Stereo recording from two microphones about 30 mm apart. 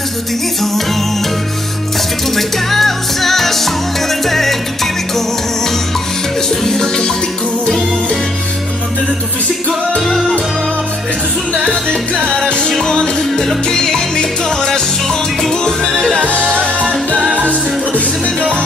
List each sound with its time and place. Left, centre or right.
2.3 s music: centre
4.3 s salsa music: centre
6.5 s music: centre
9.9 s music: centre
12.8 s music: left